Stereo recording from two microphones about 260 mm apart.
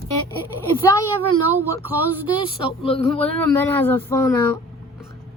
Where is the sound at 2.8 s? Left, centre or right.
Left.